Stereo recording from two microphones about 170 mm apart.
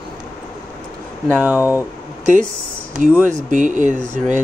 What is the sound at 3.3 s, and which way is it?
Speech, 50° right (ahead or behind).